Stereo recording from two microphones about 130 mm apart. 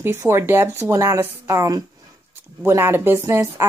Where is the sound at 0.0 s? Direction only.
20° right (ahead or behind).